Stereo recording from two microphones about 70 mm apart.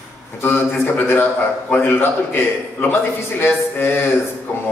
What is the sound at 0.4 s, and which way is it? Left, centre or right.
A man's voice, left.